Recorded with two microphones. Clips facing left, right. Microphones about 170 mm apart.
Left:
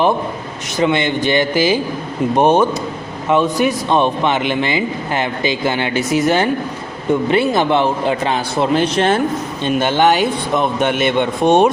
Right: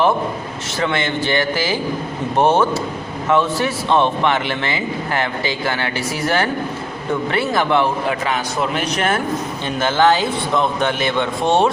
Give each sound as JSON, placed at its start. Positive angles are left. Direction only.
{"t": 0.8, "sound": "a man's voice", "side_deg": 15}